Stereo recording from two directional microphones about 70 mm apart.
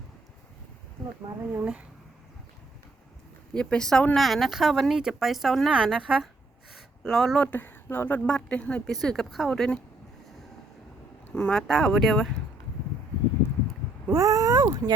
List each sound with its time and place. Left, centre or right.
1.5 s a woman's voice: centre
3.5 s speech: centre
4.1 s a woman's voice: centre
6.7 s a sound: centre
7.3 s speech: left
8.3 s speech: centre
9.0 s speech: centre
11.3 s speech: centre
14.1 s speech: right